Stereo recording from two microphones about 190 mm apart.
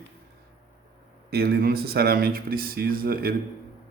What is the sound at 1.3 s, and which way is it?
Speech, 55° right (ahead or behind).